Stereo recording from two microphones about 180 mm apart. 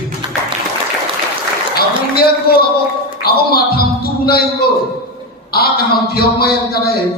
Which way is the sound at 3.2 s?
60° left (ahead or behind).